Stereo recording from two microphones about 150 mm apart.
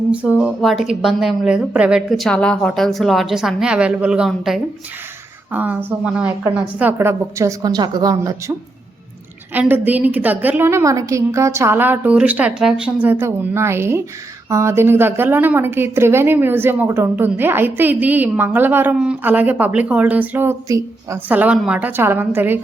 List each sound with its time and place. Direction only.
0.1 s a woman's voice: 10° right (ahead or behind)